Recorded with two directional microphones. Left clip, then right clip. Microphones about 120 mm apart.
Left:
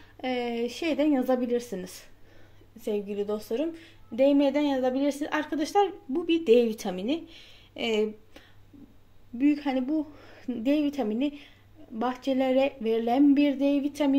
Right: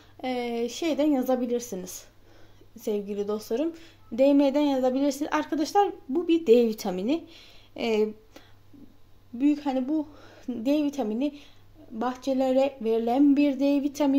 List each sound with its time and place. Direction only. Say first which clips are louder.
0.2 s speech: even; centre (ahead or behind)
2.8 s a woman's voice: right 1 dB; 20° right (ahead or behind)
9.4 s speech: even; 10° left (ahead or behind); by 14.1 s 15° right (ahead or behind)